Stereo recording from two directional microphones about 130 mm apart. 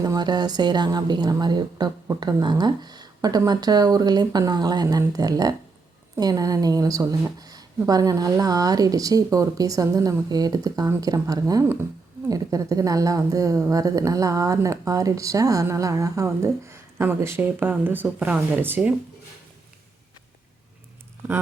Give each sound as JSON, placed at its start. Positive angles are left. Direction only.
{"t": 0.0, "sound": "a woman's voice", "side_deg": -30}